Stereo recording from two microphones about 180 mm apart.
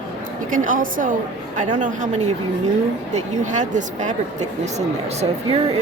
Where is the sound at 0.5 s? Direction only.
45° right (ahead or behind).